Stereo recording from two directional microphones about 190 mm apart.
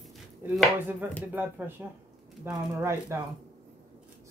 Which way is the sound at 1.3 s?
10° right (ahead or behind).